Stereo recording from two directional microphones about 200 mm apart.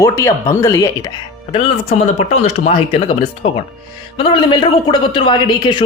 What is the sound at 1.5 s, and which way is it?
Speech, 30° left (ahead or behind).